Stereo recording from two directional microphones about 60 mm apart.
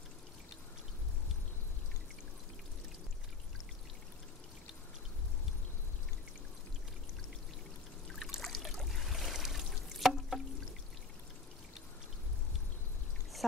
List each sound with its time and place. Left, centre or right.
8.1 s trickle: centre